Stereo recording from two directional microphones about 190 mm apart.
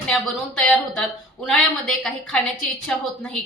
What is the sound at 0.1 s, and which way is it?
A woman's voice, centre (ahead or behind).